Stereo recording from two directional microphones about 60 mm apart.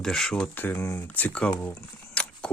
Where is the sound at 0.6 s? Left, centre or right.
Left.